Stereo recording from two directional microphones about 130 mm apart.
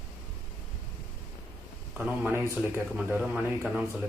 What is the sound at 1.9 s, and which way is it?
A man's voice, 15° right (ahead or behind).